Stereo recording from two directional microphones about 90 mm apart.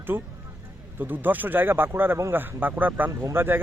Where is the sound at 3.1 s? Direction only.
30° right (ahead or behind).